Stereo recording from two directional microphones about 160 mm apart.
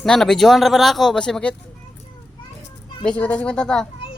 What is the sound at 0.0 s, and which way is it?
Speech, 5° left (ahead or behind).